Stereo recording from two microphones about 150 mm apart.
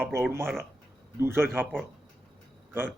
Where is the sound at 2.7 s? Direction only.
15° right (ahead or behind).